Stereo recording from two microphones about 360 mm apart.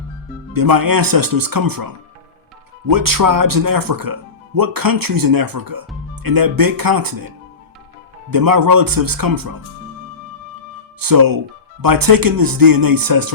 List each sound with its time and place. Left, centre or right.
0.5 s speech: right
11.0 s speech: right